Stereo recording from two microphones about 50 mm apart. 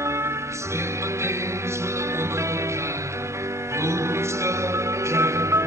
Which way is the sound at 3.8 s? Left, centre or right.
Right.